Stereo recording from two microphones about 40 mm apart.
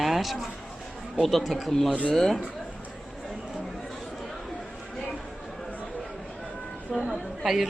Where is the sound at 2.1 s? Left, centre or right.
Centre.